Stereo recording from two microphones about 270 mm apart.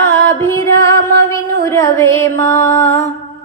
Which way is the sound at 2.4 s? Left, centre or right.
Left.